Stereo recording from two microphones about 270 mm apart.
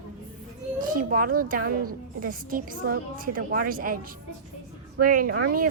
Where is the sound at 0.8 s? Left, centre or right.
Right.